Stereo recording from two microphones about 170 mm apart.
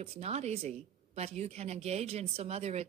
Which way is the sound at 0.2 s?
40° right (ahead or behind).